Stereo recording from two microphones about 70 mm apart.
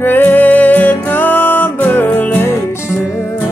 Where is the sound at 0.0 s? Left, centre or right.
Left.